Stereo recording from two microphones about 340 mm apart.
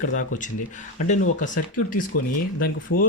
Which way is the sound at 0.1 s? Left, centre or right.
Left.